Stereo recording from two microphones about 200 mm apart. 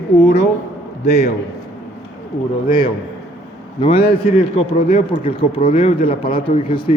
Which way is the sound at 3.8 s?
30° left (ahead or behind).